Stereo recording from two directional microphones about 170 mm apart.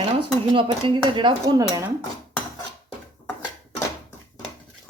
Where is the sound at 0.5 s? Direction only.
30° right (ahead or behind).